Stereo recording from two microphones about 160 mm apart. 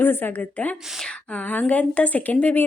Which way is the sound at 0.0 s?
10° left (ahead or behind).